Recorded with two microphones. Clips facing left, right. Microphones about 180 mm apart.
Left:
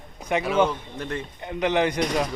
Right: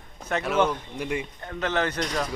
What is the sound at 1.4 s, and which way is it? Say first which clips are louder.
Speech: left 7 dB; 15° left (ahead or behind).